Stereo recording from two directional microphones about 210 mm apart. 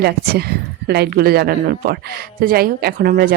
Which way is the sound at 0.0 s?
50° right (ahead or behind).